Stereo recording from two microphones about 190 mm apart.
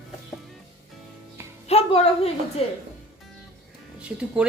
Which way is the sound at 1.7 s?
35° left (ahead or behind).